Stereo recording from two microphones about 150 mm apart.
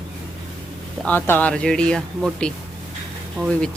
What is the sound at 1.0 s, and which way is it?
A woman's voice, 15° left (ahead or behind).